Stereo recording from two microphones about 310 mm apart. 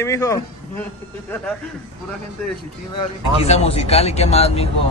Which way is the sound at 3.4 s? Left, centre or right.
Centre.